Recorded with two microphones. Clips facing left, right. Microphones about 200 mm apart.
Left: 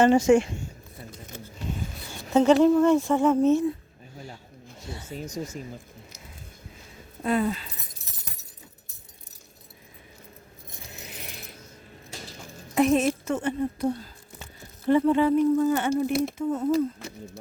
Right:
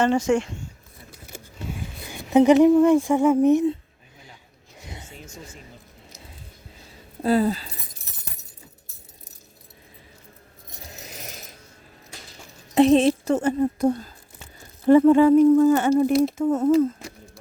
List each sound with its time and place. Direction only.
0.0 s speech: 10° left (ahead or behind)
1.1 s a sound: 10° right (ahead or behind)
5.0 s speech: 40° left (ahead or behind)
7.2 s a woman's voice: 35° right (ahead or behind)
11.0 s mechanisms: 40° right (ahead or behind)
12.7 s a woman's voice: 30° right (ahead or behind); by 16.1 s 45° right (ahead or behind)
16.4 s speech: 75° right (ahead or behind)